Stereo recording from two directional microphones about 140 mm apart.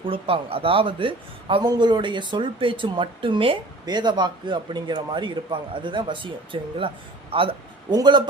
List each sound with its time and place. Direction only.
0.0 s speech: 40° right (ahead or behind)